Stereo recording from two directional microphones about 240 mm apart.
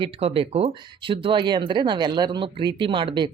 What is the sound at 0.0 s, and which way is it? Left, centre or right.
Speech, right.